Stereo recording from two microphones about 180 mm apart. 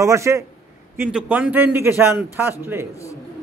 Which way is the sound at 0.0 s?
15° right (ahead or behind).